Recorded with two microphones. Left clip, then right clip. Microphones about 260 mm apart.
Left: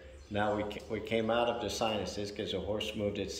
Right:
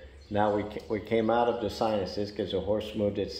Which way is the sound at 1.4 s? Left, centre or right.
Right.